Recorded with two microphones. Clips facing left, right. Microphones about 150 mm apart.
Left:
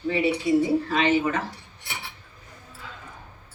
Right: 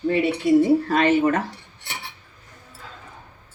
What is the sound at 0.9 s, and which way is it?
Speech, 45° right (ahead or behind).